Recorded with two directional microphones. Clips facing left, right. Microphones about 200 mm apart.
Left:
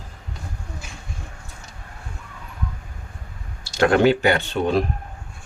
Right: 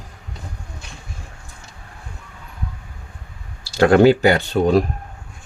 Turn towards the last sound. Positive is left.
turn(degrees=-40)  # may be behind; listen again after turning